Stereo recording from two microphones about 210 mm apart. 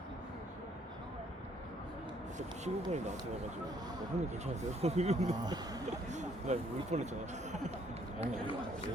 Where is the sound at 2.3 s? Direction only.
35° right (ahead or behind).